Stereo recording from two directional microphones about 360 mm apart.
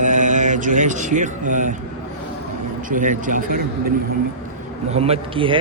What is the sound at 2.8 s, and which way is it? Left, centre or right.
Speech, right.